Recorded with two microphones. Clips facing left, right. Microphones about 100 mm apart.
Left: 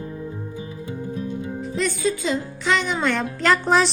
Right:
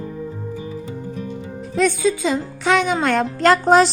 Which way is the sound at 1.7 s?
90° right.